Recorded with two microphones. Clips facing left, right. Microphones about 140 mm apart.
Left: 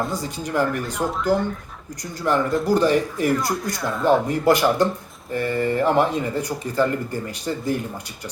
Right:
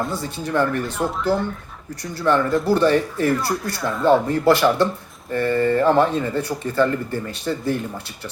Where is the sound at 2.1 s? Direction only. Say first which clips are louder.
Right 2 dB; 15° left (ahead or behind).